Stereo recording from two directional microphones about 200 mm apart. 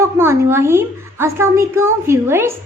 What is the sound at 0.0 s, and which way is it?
A woman's voice, 10° right (ahead or behind).